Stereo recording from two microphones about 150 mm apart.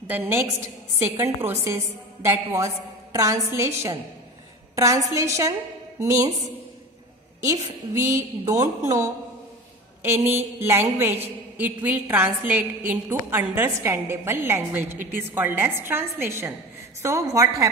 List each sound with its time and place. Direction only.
0.1 s a woman's voice: 15° right (ahead or behind)
7.4 s a woman's voice: 25° right (ahead or behind)